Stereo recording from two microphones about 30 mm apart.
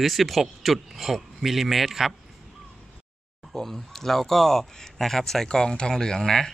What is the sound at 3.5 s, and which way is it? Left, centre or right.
Speech, centre.